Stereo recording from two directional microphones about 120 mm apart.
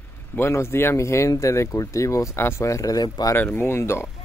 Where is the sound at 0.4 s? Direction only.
20° left (ahead or behind).